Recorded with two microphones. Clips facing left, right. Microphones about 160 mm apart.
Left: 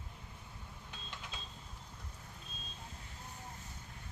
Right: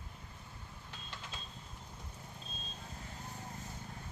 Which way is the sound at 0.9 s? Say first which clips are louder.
Right 1 dB; 15° left (ahead or behind).